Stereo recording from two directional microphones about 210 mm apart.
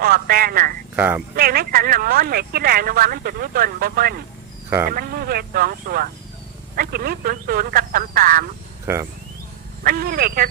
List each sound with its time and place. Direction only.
0.0 s a sound: 45° right (ahead or behind)
0.9 s speech: 10° right (ahead or behind)
1.4 s speech: 45° right (ahead or behind)
8.9 s speech: 10° right (ahead or behind)
9.8 s speech: 45° right (ahead or behind)